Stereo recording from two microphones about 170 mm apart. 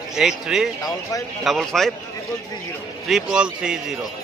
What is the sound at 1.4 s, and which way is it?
Speech, centre (ahead or behind).